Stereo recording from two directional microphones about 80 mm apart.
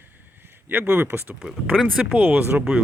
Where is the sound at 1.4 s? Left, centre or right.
Centre.